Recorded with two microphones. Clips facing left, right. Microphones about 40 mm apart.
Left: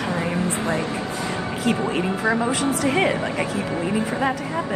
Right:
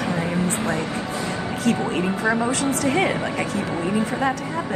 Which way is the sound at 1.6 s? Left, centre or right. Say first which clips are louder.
Even; centre.